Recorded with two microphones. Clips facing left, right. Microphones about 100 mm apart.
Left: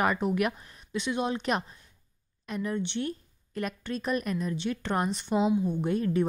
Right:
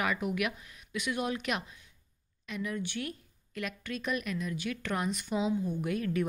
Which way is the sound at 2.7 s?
25° left (ahead or behind).